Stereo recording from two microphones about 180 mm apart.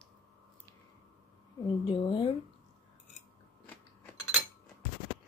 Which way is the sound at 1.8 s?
25° left (ahead or behind).